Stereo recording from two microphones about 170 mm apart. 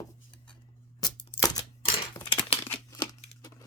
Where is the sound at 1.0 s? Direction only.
20° left (ahead or behind).